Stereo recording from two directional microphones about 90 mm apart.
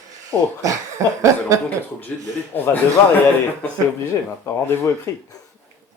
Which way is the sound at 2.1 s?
15° left (ahead or behind).